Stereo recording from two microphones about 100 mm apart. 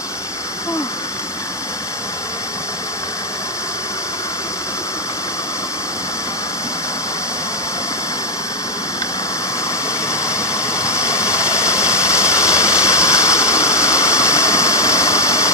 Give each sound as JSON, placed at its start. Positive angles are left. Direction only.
{"t": 10.1, "sound": "engine", "side_deg": 30}